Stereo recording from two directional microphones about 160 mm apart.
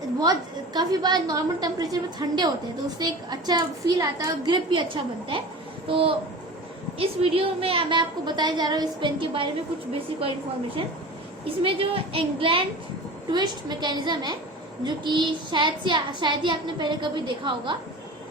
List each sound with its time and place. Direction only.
0.2 s a woman's voice: 25° right (ahead or behind)
11.4 s a woman's voice: 35° right (ahead or behind)